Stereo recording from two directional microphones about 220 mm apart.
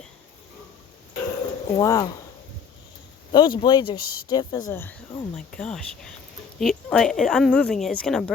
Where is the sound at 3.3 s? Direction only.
20° left (ahead or behind).